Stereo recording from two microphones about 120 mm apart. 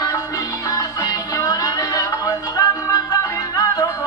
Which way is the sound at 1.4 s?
30° left (ahead or behind).